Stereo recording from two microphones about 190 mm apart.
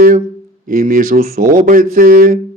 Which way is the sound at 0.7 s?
45° right (ahead or behind).